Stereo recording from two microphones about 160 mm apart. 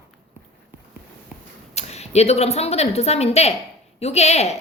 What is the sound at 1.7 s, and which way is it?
A woman's voice, 40° left (ahead or behind).